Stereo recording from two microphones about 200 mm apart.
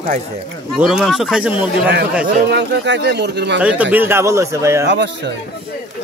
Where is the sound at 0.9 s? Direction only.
Centre (ahead or behind).